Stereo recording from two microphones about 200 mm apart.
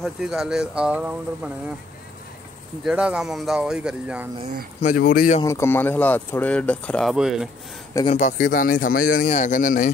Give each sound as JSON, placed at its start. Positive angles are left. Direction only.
{"t": 0.0, "sound": "speech", "side_deg": 0}
{"t": 2.8, "sound": "speech", "side_deg": -5}
{"t": 4.8, "sound": "speech", "side_deg": 45}
{"t": 5.4, "sound": "speech", "side_deg": 15}
{"t": 8.1, "sound": "speech", "side_deg": 40}